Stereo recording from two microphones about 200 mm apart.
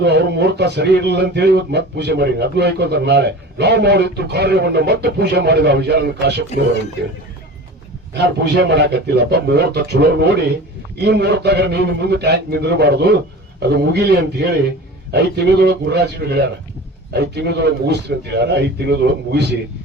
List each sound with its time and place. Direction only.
0.0 s speech: 55° right (ahead or behind)
8.1 s speech: 60° right (ahead or behind)